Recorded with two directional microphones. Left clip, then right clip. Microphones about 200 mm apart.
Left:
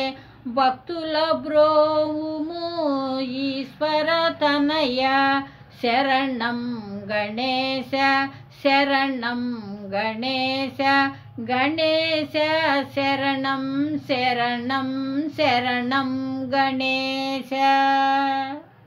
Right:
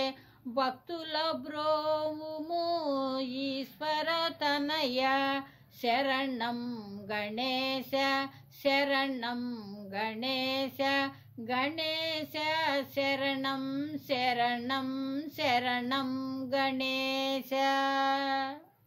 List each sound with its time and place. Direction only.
0.6 s female singing: 40° right (ahead or behind)